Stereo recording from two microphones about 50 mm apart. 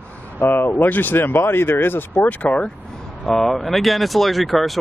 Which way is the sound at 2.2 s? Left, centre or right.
Left.